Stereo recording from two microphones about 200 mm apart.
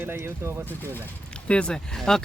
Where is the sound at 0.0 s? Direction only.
10° right (ahead or behind).